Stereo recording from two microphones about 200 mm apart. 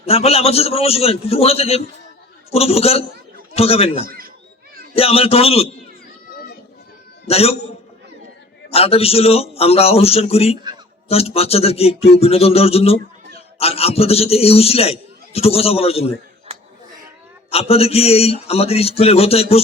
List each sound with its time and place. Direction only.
0.0 s a man's voice: 30° left (ahead or behind)
4.0 s a sound: 45° right (ahead or behind)
4.9 s a man's voice: 30° left (ahead or behind)
7.3 s a man's voice: 30° left (ahead or behind)
8.7 s a man's voice: 30° left (ahead or behind)
17.5 s a man's voice: 30° left (ahead or behind)